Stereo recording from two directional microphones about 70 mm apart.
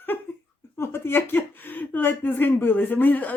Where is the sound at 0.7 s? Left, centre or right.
Left.